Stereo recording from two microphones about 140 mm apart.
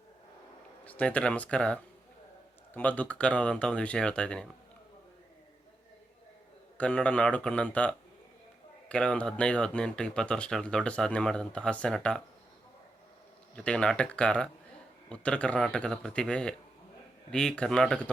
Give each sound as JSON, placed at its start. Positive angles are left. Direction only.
{"t": 0.9, "sound": "speech", "side_deg": 10}
{"t": 6.7, "sound": "speech", "side_deg": 10}
{"t": 13.6, "sound": "speech", "side_deg": 5}